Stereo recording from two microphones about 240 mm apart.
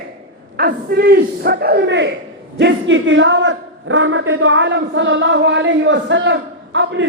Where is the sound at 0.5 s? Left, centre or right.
Right.